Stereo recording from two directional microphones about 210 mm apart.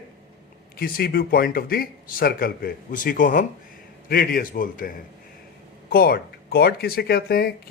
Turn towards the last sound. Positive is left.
turn(degrees=45)  # may be behind; listen again after turning